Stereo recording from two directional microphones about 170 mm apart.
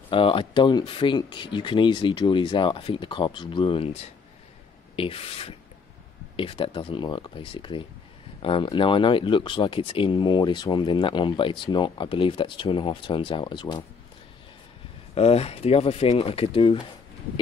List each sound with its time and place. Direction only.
0.1 s speech: 30° left (ahead or behind)
15.1 s speech: 35° left (ahead or behind)